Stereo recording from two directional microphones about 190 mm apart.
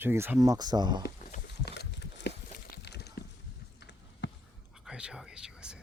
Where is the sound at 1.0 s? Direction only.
55° left (ahead or behind).